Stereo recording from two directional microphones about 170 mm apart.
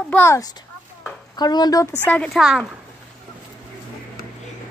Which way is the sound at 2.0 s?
5° left (ahead or behind).